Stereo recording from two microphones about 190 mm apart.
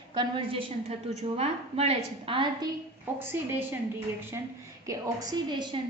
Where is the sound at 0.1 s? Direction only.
25° right (ahead or behind).